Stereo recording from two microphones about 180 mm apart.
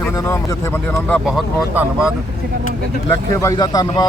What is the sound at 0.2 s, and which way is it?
Speech, 15° left (ahead or behind).